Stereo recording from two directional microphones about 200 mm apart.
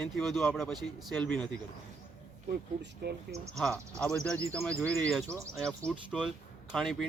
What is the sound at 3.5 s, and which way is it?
Speech, 5° left (ahead or behind).